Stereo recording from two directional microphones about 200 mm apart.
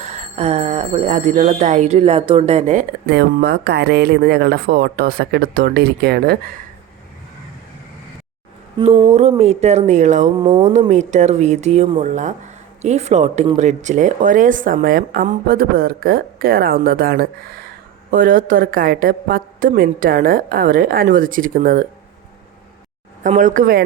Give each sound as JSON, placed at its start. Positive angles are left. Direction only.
{"t": 0.0, "sound": "speech", "side_deg": -35}
{"t": 3.1, "sound": "a woman's voice", "side_deg": -55}
{"t": 8.8, "sound": "a sound", "side_deg": -20}
{"t": 9.4, "sound": "speech", "side_deg": -30}
{"t": 10.3, "sound": "a sound", "side_deg": -20}
{"t": 10.6, "sound": "a woman's voice", "side_deg": -35}
{"t": 23.2, "sound": "speech", "side_deg": -40}